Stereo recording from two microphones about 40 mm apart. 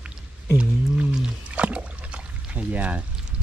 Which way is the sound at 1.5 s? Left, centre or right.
Right.